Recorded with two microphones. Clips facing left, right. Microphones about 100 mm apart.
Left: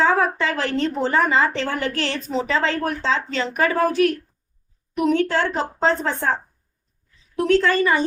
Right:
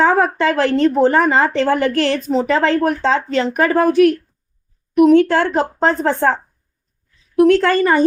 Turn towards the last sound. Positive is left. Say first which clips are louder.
# right 4 dB
turn(degrees=-55)  # may be behind; listen again after turning